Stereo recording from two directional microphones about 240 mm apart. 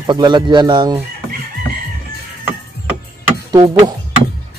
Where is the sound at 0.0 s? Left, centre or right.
Centre.